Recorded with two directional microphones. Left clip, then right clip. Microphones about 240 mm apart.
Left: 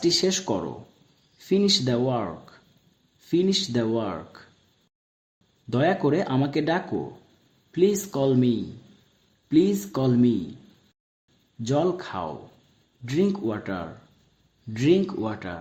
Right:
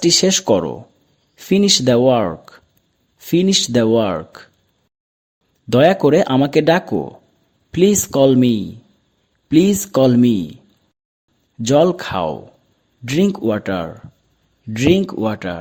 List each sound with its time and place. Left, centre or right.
0.0 s speech: right
5.7 s speech: right
11.6 s speech: right